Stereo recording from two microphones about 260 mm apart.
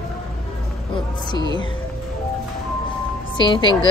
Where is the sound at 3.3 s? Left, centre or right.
Centre.